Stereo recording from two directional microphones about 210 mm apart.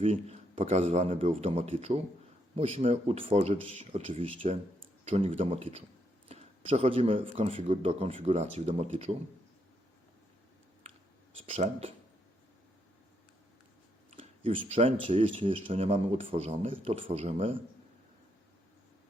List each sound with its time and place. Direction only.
0.0 s a man's voice: 30° right (ahead or behind)
11.3 s speech: 30° right (ahead or behind)
14.1 s speech: 25° right (ahead or behind)